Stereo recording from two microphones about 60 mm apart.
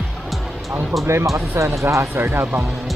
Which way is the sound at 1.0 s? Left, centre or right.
Right.